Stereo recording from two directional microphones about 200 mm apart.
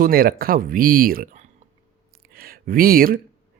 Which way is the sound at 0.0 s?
45° right (ahead or behind).